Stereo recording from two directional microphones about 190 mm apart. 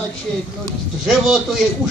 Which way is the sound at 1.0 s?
Centre (ahead or behind).